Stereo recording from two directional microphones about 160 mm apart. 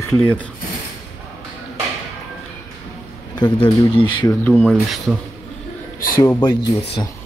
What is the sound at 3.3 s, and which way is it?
Speech, 30° left (ahead or behind).